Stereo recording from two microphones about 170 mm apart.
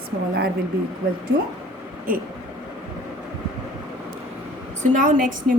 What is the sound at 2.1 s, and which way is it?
Speech, 55° right (ahead or behind).